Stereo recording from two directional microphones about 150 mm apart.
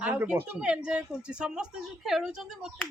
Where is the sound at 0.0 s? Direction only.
10° right (ahead or behind).